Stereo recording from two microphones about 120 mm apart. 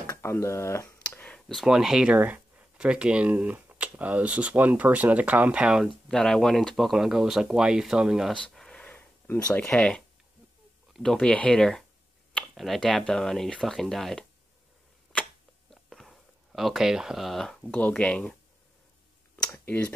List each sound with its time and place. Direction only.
0.0 s speech: 25° left (ahead or behind)
1.0 s clicking: 10° left (ahead or behind)
1.5 s speech: centre (ahead or behind)
6.0 s speech: 5° left (ahead or behind)
8.4 s a sound: 5° left (ahead or behind)
10.9 s speech: 5° left (ahead or behind)
15.7 s speech: centre (ahead or behind)
19.5 s speech: 15° left (ahead or behind)